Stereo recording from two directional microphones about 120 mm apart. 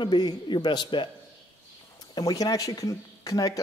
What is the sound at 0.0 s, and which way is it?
Speech, 40° left (ahead or behind).